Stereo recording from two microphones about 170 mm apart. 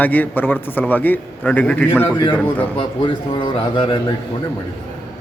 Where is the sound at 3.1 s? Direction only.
30° left (ahead or behind).